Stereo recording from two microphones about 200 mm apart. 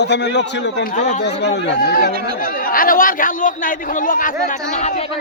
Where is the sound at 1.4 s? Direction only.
60° left (ahead or behind); by 5.1 s 35° left (ahead or behind).